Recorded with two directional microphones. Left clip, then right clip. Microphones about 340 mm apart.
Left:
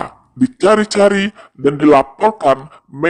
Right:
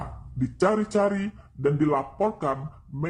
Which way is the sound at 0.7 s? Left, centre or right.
Left.